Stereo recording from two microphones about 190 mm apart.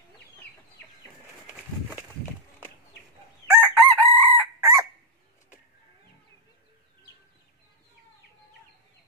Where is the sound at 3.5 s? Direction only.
15° right (ahead or behind).